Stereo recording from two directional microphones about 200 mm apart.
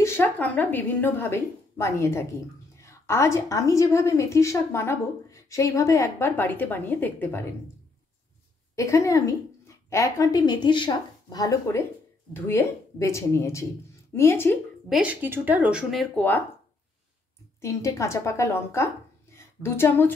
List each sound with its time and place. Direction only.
0.0 s a woman's voice: 10° left (ahead or behind)
8.7 s a woman's voice: 15° left (ahead or behind)
14.9 s speech: 5° right (ahead or behind)
17.6 s a woman's voice: 15° left (ahead or behind)
19.3 s a sound: 10° left (ahead or behind)